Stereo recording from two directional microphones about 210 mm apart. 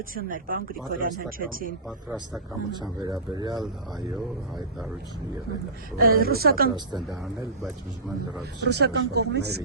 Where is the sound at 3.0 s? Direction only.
20° right (ahead or behind).